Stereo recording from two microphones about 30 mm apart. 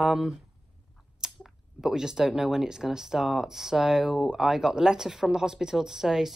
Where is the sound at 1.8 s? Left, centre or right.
Centre.